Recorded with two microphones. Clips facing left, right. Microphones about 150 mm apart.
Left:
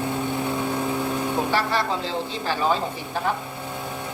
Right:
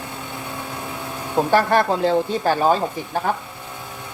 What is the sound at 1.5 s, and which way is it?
Speech, 50° right (ahead or behind).